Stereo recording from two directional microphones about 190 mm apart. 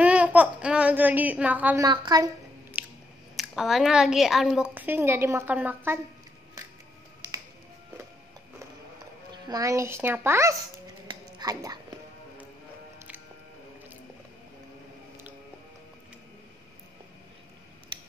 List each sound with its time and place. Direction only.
0.0 s speech: 5° right (ahead or behind)
1.9 s a woman's voice: 20° right (ahead or behind)
2.8 s scissors: 10° right (ahead or behind)
3.3 s a woman's voice: centre (ahead or behind)
9.3 s speech: 20° right (ahead or behind)
11.1 s a sound: 20° right (ahead or behind)